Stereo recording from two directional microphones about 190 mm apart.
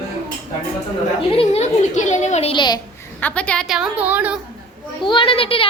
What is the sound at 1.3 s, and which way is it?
A child's voice, 30° left (ahead or behind).